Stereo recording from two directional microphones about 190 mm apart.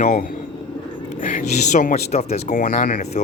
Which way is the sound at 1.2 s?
40° left (ahead or behind).